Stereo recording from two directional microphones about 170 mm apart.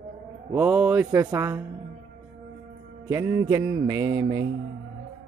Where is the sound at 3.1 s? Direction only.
20° right (ahead or behind).